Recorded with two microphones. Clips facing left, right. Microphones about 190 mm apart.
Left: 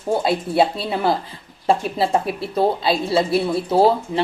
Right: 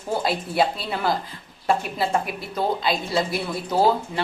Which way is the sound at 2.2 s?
30° left (ahead or behind).